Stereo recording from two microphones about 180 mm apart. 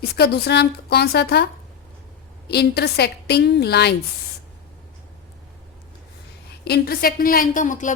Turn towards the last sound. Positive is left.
turn(degrees=45)  # may be behind; listen again after turning